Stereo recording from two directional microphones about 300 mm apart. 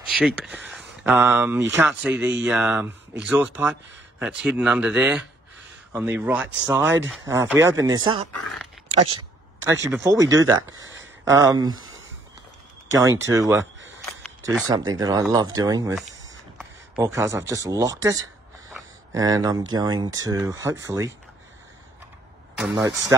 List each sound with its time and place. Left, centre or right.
0.1 s speech: centre
9.7 s speech: centre
10.8 s a sound: right
11.2 s speech: centre
13.3 s speech: centre
14.7 s speech: centre
16.5 s a sound: centre
17.6 s speech: centre
22.6 s speech: centre